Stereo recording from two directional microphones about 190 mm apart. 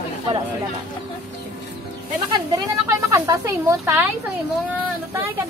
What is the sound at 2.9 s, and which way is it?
Speech, 15° right (ahead or behind).